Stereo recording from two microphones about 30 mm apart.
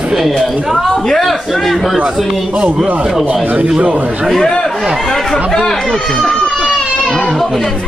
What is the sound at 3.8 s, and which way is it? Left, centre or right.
Speech, right.